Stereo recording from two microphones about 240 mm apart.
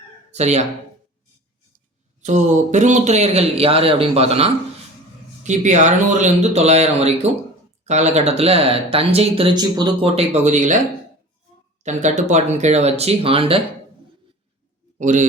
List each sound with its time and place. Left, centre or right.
0.3 s speech: right
2.2 s speech: right
11.8 s speech: right
14.9 s a man's voice: right